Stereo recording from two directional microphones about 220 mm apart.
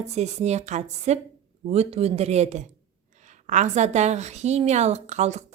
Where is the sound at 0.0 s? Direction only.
30° right (ahead or behind).